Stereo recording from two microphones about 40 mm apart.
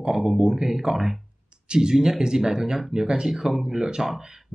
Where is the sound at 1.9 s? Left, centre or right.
Centre.